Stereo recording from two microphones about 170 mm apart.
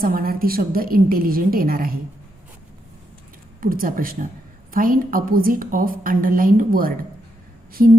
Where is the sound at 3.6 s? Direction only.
55° right (ahead or behind).